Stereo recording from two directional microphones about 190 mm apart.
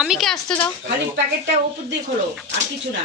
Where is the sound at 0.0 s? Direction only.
Centre (ahead or behind).